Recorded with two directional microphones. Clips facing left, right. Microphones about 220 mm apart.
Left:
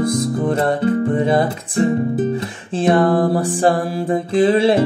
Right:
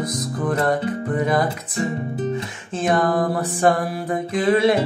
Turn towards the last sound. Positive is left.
turn(degrees=30)  # may be behind; listen again after turning